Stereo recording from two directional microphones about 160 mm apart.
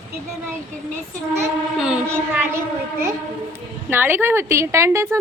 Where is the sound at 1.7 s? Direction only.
5° right (ahead or behind).